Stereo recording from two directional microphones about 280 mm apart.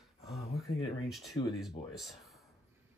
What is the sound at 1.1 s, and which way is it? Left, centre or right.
Speech, centre.